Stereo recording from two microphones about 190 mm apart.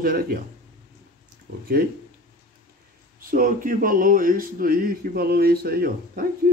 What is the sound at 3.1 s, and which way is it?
Speech, 50° right (ahead or behind).